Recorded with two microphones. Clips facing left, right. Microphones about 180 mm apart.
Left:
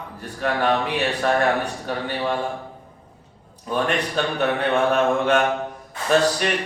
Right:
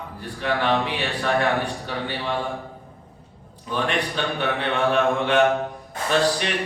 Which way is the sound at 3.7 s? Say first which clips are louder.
Left 2 dB; 45° left (ahead or behind).